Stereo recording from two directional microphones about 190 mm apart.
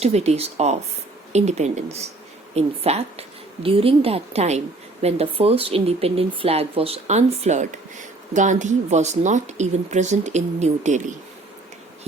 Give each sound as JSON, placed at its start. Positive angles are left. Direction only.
{"t": 0.0, "sound": "speech", "side_deg": -35}